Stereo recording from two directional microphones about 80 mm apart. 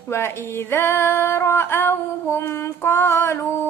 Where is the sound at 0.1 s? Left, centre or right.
Left.